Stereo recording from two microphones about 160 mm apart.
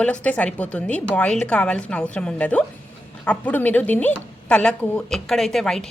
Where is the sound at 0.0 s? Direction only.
10° left (ahead or behind).